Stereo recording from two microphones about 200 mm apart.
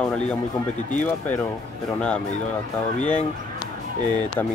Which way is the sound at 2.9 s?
35° left (ahead or behind).